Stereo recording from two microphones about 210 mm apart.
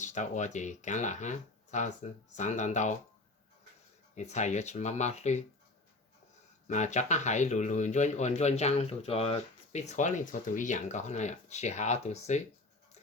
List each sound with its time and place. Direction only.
0.0 s speech: 35° left (ahead or behind)
4.1 s speech: 35° left (ahead or behind)
6.7 s speech: 35° left (ahead or behind)